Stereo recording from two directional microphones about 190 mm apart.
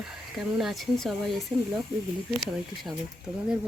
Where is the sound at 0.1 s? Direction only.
Centre (ahead or behind).